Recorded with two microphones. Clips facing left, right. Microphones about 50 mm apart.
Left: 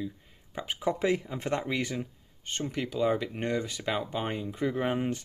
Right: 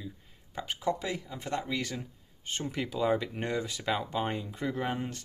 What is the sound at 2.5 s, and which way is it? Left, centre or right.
Speech, centre.